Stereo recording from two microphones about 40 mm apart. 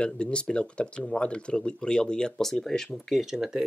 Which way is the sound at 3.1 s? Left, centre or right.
Centre.